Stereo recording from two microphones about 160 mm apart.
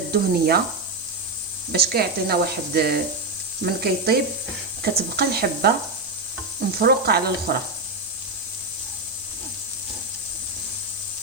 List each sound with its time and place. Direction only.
0.1 s speech: 75° right (ahead or behind)
1.7 s speech: 75° right (ahead or behind)
6.7 s speech: 75° right (ahead or behind)